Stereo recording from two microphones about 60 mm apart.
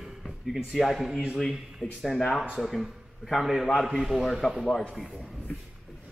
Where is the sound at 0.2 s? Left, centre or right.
Centre.